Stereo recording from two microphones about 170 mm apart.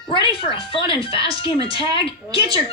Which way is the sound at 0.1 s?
30° left (ahead or behind).